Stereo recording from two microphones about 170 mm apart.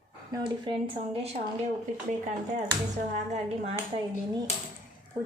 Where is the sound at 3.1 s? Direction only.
40° right (ahead or behind).